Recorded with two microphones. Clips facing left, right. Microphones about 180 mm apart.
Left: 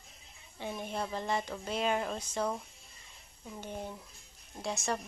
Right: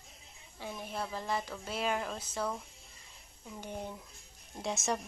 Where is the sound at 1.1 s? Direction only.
Centre (ahead or behind).